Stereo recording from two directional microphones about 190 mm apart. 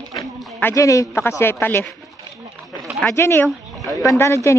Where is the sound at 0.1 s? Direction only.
Centre (ahead or behind).